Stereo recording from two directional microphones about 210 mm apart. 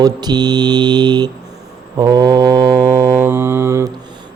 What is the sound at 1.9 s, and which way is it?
Mantra, 20° right (ahead or behind).